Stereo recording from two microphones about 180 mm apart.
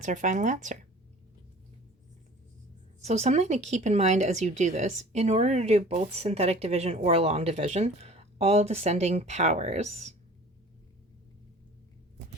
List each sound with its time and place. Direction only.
0.0 s speech: 45° right (ahead or behind)
3.0 s speech: 40° right (ahead or behind)